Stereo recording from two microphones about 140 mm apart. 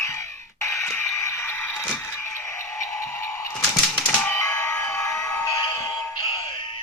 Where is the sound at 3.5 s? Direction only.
10° left (ahead or behind).